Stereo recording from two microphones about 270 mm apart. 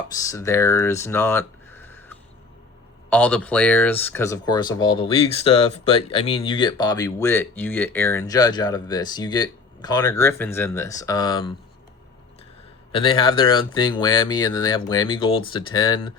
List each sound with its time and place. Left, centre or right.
0.1 s speech: centre
12.9 s speech: centre